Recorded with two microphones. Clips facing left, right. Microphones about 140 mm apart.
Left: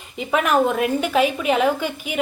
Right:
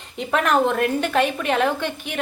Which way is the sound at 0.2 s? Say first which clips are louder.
Left 1 dB; 5° left (ahead or behind).